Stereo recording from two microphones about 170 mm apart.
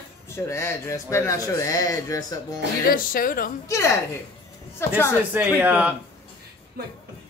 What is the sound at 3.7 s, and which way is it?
A woman's voice, 15° left (ahead or behind).